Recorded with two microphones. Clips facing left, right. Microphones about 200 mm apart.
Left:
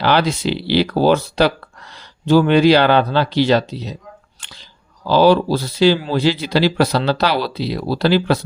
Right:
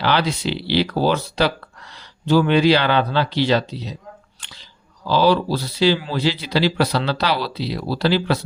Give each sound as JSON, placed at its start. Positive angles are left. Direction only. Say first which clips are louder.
{"t": 0.0, "sound": "speech", "louder": "left 4 dB", "side_deg": 45}
{"t": 5.0, "sound": "speech", "louder": "left 4 dB", "side_deg": 50}